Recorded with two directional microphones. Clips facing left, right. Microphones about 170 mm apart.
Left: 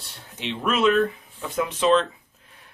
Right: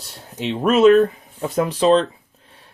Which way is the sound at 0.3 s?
40° right (ahead or behind).